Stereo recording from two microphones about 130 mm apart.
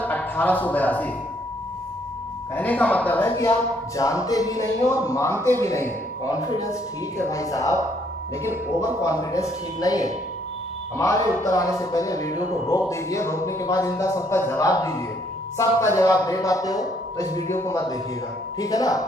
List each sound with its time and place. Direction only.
0.0 s speech: 15° left (ahead or behind)
2.5 s a man's voice: 10° left (ahead or behind); by 19.0 s 30° left (ahead or behind)